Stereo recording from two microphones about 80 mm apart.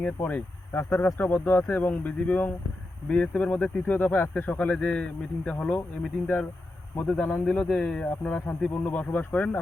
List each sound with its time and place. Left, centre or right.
0.2 s speech: left